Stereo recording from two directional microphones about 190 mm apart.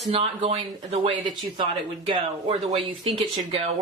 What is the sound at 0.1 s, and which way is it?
Speech, 30° right (ahead or behind).